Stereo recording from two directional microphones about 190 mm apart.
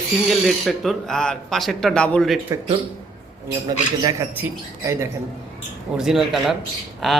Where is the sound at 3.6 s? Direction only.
20° right (ahead or behind).